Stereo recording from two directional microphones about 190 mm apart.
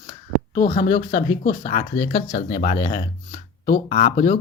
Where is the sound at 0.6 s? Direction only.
40° left (ahead or behind).